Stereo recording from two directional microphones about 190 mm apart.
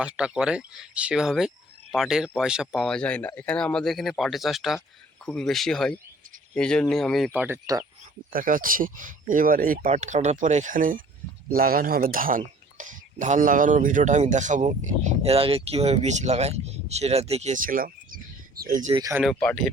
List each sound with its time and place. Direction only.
0.0 s speech: 5° right (ahead or behind)
7.4 s speech: 15° right (ahead or behind)
8.3 s speech: 45° right (ahead or behind)
18.9 s speech: 15° right (ahead or behind)
19.2 s speech: 5° left (ahead or behind)